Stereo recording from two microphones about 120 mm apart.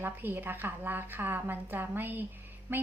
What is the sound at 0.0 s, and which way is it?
A woman's voice, 15° right (ahead or behind).